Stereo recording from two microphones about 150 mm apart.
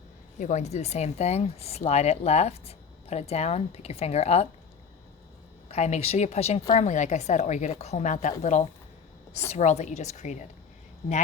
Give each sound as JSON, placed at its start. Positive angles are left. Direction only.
{"t": 0.3, "sound": "speech", "side_deg": 55}
{"t": 5.7, "sound": "speech", "side_deg": 45}